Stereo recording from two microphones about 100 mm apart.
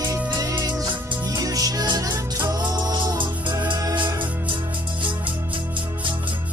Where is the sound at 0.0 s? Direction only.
35° right (ahead or behind).